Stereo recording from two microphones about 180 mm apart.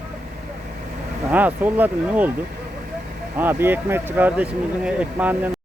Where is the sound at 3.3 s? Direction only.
10° right (ahead or behind).